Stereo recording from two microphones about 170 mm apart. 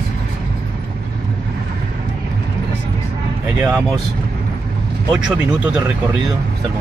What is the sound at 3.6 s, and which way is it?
Speech, 10° right (ahead or behind).